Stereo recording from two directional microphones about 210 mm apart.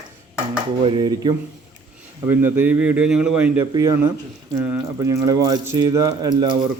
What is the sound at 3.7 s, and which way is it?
Speech, 20° right (ahead or behind).